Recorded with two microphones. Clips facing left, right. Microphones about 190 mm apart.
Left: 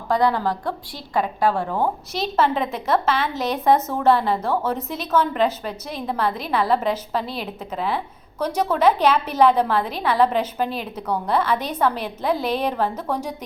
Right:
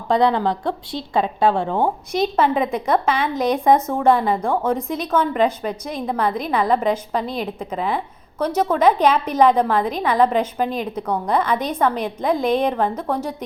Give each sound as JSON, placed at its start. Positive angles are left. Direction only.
{"t": 0.1, "sound": "a woman's voice", "side_deg": -20}
{"t": 2.7, "sound": "a woman's voice", "side_deg": 5}
{"t": 3.8, "sound": "a woman's voice", "side_deg": -10}
{"t": 4.0, "sound": "a woman's voice", "side_deg": 0}